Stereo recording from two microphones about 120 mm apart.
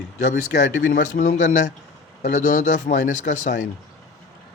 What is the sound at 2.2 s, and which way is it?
Speech, 90° left.